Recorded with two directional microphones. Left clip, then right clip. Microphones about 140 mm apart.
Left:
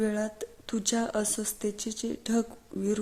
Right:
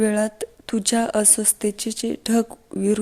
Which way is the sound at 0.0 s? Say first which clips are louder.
Right 9 dB; 25° right (ahead or behind).